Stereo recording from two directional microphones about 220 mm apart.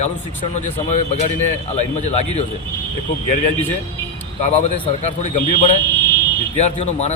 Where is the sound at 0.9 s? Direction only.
35° left (ahead or behind).